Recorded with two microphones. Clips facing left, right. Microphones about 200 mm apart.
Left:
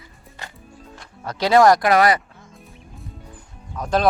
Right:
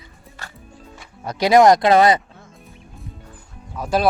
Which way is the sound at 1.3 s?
15° right (ahead or behind).